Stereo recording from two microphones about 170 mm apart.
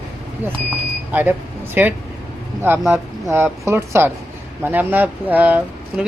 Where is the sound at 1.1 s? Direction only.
10° right (ahead or behind).